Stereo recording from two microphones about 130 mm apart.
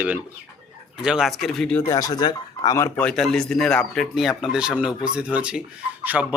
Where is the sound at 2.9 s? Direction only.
5° left (ahead or behind).